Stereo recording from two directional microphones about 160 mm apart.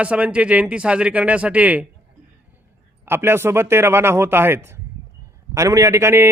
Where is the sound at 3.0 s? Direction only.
15° right (ahead or behind).